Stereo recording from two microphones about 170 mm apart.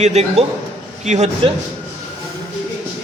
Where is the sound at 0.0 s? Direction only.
40° right (ahead or behind).